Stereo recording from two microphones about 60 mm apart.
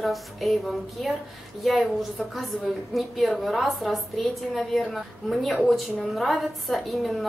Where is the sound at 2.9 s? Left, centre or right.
Centre.